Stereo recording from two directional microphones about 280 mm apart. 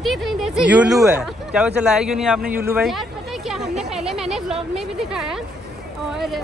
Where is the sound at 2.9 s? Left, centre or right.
Centre.